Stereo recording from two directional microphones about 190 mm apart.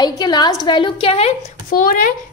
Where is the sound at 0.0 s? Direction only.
20° left (ahead or behind).